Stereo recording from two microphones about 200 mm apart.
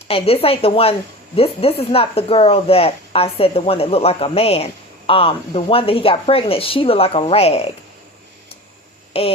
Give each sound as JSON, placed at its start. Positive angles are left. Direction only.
{"t": 0.1, "sound": "speech", "side_deg": 30}
{"t": 9.1, "sound": "speech", "side_deg": 30}